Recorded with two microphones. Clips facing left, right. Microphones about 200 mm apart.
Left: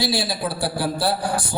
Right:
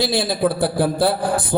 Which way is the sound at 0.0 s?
50° right (ahead or behind).